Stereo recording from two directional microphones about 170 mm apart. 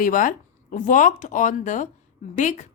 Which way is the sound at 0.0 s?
50° left (ahead or behind).